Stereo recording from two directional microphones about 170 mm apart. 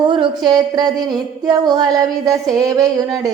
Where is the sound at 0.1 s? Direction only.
25° right (ahead or behind).